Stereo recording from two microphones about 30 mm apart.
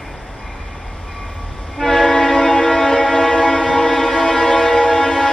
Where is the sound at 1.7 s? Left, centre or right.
Centre.